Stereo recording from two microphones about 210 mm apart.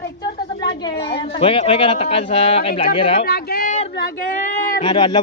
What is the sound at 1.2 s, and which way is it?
Speech, 25° left (ahead or behind).